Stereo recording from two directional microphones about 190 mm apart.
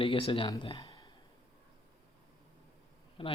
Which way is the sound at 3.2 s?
25° left (ahead or behind).